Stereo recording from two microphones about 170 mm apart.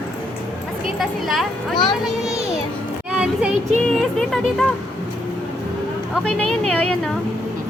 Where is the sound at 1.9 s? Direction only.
5° right (ahead or behind).